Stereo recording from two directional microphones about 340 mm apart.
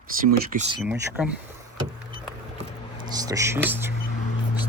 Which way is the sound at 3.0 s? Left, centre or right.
Centre.